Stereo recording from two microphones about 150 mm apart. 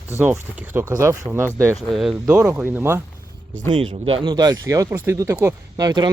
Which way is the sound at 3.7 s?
35° right (ahead or behind).